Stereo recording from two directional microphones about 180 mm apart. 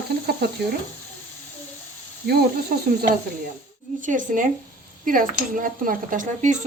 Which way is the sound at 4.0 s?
45° right (ahead or behind).